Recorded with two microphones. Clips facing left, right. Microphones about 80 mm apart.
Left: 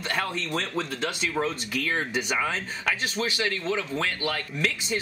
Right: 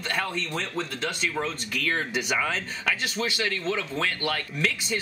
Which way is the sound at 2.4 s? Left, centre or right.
Centre.